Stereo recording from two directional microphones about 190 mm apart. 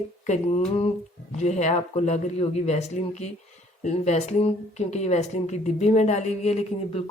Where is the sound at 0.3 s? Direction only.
35° left (ahead or behind).